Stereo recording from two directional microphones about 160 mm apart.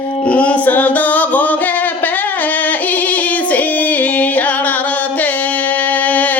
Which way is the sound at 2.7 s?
10° left (ahead or behind).